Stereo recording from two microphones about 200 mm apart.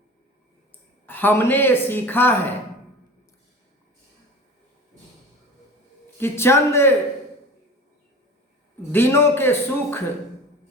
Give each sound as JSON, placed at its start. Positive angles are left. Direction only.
{"t": 1.0, "sound": "a woman's voice", "side_deg": 10}
{"t": 6.1, "sound": "a woman's voice", "side_deg": 10}
{"t": 8.9, "sound": "a woman's voice", "side_deg": 10}